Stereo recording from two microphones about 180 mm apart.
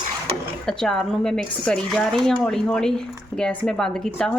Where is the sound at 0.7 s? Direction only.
5° left (ahead or behind).